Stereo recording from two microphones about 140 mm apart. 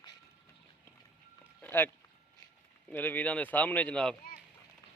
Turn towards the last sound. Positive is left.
turn(degrees=5)  # may be behind; listen again after turning